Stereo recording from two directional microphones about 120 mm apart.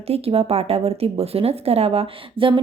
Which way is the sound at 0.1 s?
55° right (ahead or behind).